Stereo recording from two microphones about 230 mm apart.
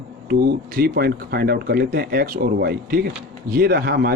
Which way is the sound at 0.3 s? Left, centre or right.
Right.